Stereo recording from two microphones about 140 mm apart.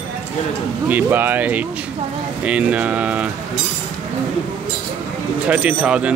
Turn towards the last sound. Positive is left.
turn(degrees=-10)  # may be behind; listen again after turning